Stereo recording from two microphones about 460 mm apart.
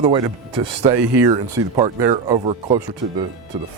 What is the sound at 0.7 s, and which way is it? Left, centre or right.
Speech, right.